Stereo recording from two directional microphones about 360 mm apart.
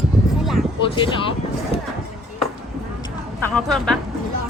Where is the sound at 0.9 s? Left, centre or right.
Centre.